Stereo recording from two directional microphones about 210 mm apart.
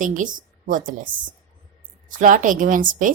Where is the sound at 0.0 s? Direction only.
40° right (ahead or behind).